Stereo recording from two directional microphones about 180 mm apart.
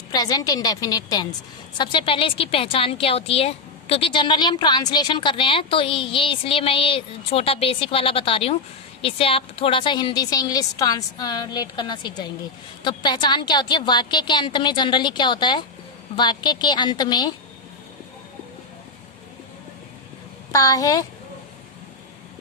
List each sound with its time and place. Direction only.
0.1 s a woman's voice: 20° left (ahead or behind)
20.5 s a woman's voice: 20° left (ahead or behind)